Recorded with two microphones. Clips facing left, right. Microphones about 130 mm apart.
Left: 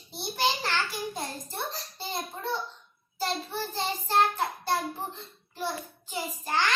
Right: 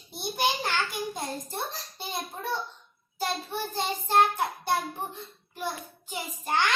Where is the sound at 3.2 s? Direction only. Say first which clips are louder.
Even; 15° right (ahead or behind).